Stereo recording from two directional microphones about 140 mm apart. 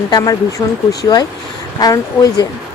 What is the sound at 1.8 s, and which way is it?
Speech, 25° left (ahead or behind).